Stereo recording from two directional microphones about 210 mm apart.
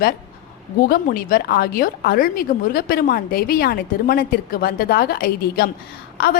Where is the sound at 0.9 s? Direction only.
45° left (ahead or behind).